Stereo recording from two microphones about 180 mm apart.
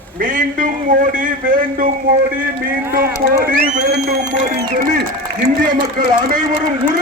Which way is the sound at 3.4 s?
50° right (ahead or behind).